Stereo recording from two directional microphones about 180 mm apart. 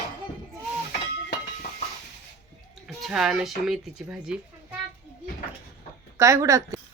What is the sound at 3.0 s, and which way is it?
Speech, centre (ahead or behind).